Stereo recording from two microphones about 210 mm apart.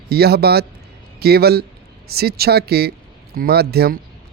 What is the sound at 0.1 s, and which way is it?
A man's voice, 50° right (ahead or behind).